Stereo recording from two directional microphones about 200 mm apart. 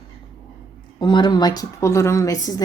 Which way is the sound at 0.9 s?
20° left (ahead or behind).